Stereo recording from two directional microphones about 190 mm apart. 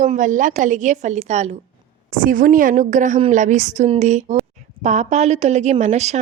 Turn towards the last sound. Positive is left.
turn(degrees=-35)  # may be behind; listen again after turning